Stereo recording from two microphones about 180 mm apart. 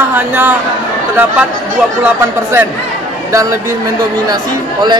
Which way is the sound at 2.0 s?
10° right (ahead or behind).